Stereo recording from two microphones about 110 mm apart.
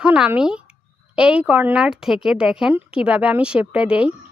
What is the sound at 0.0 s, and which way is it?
A woman's voice, 10° right (ahead or behind).